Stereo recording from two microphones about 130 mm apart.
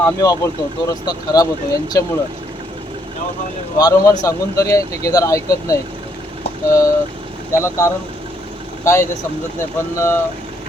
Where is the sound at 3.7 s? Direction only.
30° left (ahead or behind).